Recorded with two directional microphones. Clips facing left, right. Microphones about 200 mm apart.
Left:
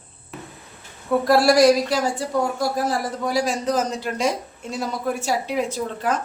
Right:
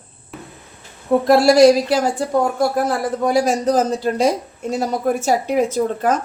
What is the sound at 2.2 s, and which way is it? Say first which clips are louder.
Speech: right 5 dB; 55° right (ahead or behind).